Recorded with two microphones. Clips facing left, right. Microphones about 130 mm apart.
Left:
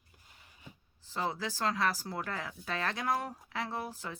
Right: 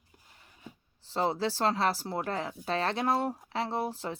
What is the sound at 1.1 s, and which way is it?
Speech, 30° right (ahead or behind).